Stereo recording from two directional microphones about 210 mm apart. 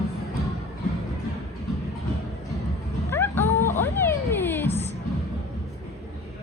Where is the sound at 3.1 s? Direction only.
10° left (ahead or behind).